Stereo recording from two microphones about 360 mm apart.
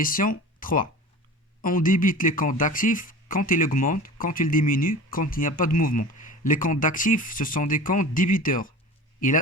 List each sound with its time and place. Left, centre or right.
0.0 s speech: left